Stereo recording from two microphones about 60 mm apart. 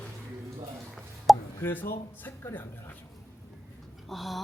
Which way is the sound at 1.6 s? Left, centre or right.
Left.